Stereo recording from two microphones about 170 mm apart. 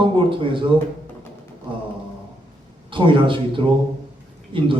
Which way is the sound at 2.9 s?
30° right (ahead or behind).